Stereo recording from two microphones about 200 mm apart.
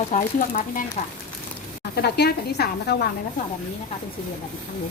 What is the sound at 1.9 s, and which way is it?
A woman's voice, 55° left (ahead or behind).